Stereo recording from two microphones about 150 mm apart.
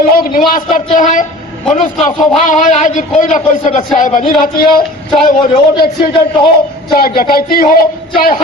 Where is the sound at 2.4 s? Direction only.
55° left (ahead or behind).